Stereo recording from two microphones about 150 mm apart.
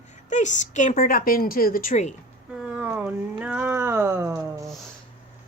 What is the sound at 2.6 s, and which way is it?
Speech, 10° right (ahead or behind).